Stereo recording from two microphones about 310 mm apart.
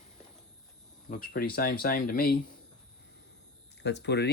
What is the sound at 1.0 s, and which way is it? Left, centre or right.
Speech, left.